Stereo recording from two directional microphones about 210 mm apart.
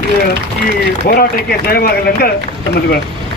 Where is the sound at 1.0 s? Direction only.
45° left (ahead or behind).